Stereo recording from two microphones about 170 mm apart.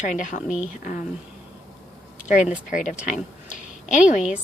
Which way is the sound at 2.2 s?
50° left (ahead or behind).